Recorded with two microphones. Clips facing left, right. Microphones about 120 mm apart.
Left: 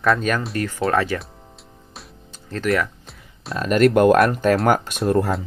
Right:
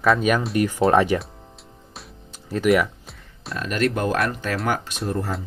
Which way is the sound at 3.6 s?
50° left (ahead or behind).